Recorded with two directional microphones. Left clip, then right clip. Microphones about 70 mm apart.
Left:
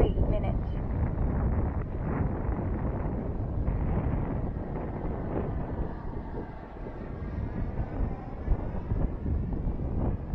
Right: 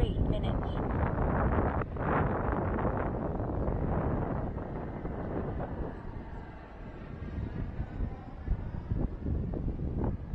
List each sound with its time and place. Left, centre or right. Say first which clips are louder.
0.0 s vehicle: left 5 dB; right
1.0 s wind noise: right 4 dB; right
4.7 s vehicle: left 3 dB; right